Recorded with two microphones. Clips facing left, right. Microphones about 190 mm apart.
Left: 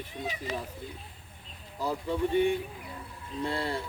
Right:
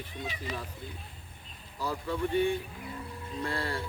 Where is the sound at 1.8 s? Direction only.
20° left (ahead or behind).